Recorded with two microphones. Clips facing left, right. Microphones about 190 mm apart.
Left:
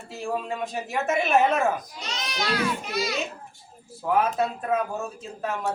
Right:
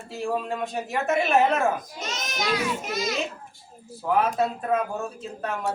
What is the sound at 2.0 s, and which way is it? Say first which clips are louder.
Speech: right 1 dB; 45° right (ahead or behind).